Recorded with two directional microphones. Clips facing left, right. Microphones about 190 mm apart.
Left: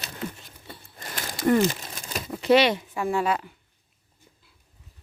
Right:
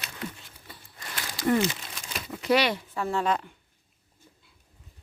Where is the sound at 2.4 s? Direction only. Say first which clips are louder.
Left 5 dB; 25° left (ahead or behind); by 3.5 s 5° left (ahead or behind).